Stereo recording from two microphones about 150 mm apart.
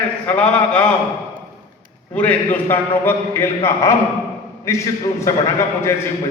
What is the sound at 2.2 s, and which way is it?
A man's voice, 10° left (ahead or behind).